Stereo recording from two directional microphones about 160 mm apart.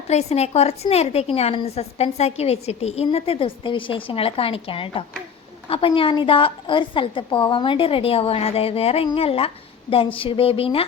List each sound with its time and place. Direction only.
0.1 s a woman's voice: 45° left (ahead or behind)